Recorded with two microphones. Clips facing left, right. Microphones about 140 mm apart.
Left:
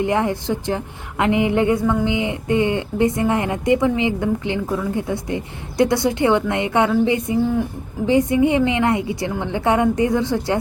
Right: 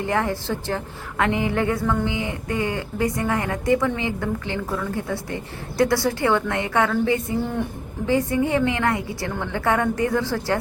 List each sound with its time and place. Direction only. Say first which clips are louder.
0.0 s speech: left 4 dB; 20° left (ahead or behind)